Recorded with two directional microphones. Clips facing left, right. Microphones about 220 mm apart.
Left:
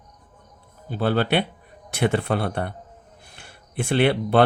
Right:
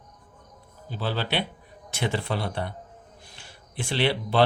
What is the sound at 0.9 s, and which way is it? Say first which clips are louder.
Speech: left 8 dB; 55° left (ahead or behind).